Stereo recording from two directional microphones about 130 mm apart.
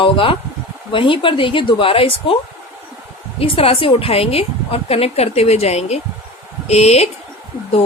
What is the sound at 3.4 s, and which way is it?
A woman's voice, 45° left (ahead or behind).